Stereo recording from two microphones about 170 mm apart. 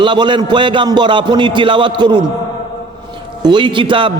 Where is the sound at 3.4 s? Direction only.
30° right (ahead or behind).